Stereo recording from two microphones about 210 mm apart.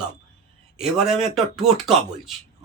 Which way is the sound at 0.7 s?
Centre (ahead or behind).